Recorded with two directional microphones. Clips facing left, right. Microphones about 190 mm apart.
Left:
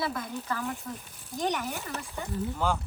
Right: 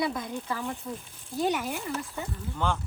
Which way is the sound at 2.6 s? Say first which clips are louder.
Even; 5° left (ahead or behind).